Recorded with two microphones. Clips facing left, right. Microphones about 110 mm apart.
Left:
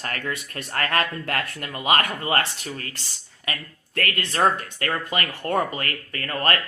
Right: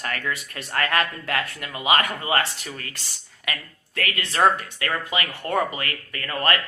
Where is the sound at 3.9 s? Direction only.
45° left (ahead or behind).